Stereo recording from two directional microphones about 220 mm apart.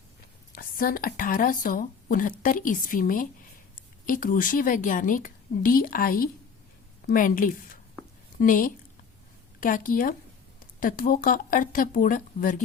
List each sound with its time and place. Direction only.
0.5 s a woman's voice: 40° left (ahead or behind)